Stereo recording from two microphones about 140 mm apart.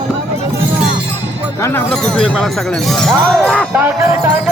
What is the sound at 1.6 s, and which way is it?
Speech, 15° left (ahead or behind).